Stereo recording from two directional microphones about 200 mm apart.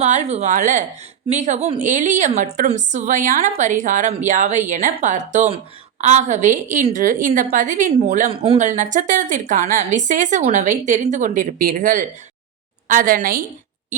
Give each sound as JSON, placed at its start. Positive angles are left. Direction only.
{"t": 0.0, "sound": "a woman's voice", "side_deg": -35}
{"t": 8.3, "sound": "a woman's voice", "side_deg": -25}